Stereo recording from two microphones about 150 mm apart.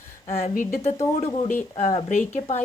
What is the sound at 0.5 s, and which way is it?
A woman's voice, 55° left (ahead or behind).